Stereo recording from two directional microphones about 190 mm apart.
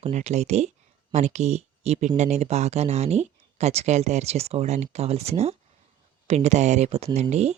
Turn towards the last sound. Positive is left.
turn(degrees=-35)  # may be behind; listen again after turning